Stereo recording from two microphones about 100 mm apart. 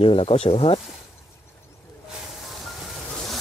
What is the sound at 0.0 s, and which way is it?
Speech, 70° left (ahead or behind).